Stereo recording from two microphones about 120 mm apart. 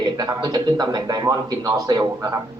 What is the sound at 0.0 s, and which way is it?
A man's voice, 35° right (ahead or behind).